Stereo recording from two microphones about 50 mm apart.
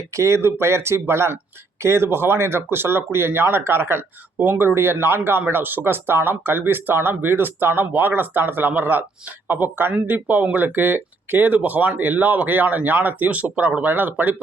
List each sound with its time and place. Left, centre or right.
0.0 s speech: right